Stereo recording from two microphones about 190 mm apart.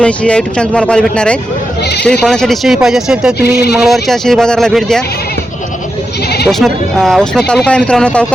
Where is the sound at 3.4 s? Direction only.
55° left (ahead or behind).